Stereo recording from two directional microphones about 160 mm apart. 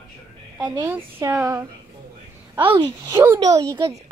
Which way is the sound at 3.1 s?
15° right (ahead or behind).